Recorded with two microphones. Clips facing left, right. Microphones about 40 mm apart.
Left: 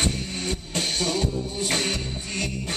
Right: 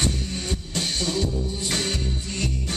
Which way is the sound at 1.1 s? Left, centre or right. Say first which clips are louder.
Even; left.